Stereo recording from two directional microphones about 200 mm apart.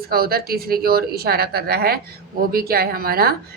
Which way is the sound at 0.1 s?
50° right (ahead or behind).